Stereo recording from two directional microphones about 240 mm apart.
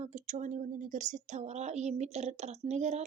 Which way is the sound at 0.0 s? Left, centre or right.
Right.